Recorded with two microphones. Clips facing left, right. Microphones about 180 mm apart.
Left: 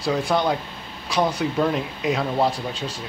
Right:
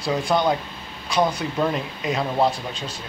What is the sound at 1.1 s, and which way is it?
Speech, centre (ahead or behind).